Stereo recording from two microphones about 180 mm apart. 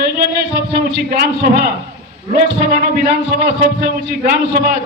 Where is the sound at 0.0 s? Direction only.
60° right (ahead or behind).